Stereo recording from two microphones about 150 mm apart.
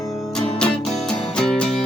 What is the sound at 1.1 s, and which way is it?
Music, 5° left (ahead or behind).